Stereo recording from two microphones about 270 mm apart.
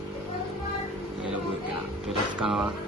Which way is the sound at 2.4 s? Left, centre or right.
Centre.